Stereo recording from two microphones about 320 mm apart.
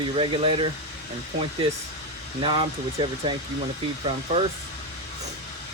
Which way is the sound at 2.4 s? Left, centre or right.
Centre.